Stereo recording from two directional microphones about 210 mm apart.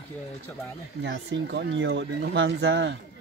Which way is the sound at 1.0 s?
55° right (ahead or behind).